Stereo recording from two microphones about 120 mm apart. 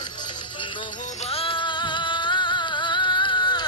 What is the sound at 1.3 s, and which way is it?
Music, 50° left (ahead or behind).